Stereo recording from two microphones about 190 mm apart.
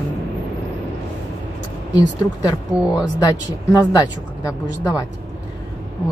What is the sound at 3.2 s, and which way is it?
A woman's voice, 20° left (ahead or behind).